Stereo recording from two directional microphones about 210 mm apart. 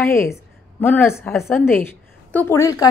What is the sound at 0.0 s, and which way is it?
A woman's voice, 10° left (ahead or behind).